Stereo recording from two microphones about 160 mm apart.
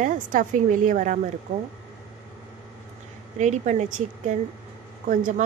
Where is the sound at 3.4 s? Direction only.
50° right (ahead or behind).